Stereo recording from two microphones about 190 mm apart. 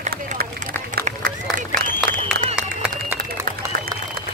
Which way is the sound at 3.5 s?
50° right (ahead or behind).